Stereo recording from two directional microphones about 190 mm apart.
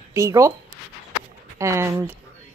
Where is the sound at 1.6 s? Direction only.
15° right (ahead or behind).